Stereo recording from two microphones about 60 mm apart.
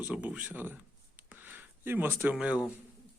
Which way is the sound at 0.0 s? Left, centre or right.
Right.